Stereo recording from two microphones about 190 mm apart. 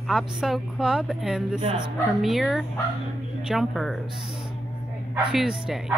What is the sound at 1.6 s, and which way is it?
Speech, 25° right (ahead or behind).